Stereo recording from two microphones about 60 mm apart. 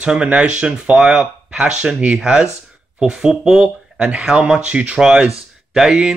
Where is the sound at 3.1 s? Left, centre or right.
Centre.